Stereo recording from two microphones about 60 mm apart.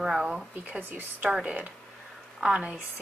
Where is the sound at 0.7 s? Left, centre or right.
Right.